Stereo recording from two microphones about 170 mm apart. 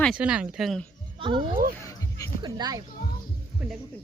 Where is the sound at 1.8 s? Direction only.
20° left (ahead or behind).